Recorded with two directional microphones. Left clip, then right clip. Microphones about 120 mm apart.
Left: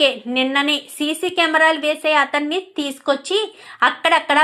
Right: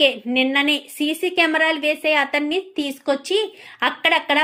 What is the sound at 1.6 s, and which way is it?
A woman's voice, 20° right (ahead or behind).